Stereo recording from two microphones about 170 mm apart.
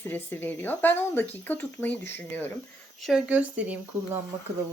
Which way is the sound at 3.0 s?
Centre (ahead or behind).